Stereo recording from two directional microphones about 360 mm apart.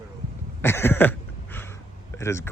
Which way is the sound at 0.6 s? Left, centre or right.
Centre.